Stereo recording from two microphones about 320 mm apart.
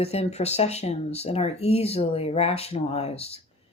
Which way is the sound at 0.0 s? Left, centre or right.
Centre.